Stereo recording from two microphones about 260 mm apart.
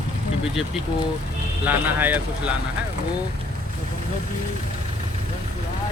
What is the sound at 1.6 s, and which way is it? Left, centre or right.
Speech, centre.